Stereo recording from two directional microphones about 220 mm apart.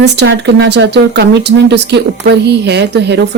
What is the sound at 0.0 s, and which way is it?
Speech, 50° right (ahead or behind).